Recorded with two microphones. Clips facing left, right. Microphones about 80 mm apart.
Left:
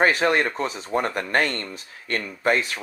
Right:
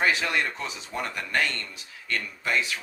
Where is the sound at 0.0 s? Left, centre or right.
Left.